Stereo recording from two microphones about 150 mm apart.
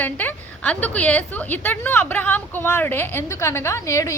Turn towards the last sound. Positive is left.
turn(degrees=20)  # may be behind; listen again after turning